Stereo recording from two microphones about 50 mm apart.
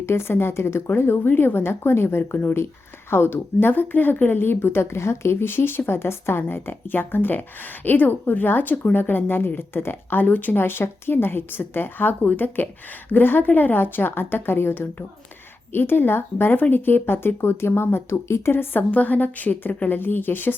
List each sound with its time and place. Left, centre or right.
0.0 s a woman's voice: left
10.6 s speech: left
18.9 s a woman's voice: left